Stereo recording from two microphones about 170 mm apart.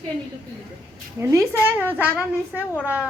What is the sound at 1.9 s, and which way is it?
Speech, 10° left (ahead or behind).